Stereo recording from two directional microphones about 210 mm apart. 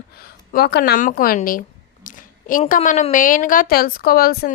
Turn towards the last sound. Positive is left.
turn(degrees=45)  # may be behind; listen again after turning